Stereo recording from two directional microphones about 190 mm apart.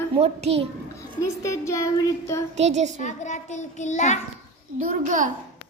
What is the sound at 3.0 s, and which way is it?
A child's voice, 40° left (ahead or behind).